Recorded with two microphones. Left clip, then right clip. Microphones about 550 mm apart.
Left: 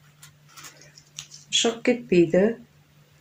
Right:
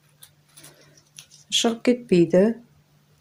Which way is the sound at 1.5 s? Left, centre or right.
Right.